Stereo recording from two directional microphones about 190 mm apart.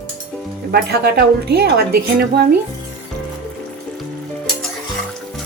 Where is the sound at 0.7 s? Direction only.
55° right (ahead or behind).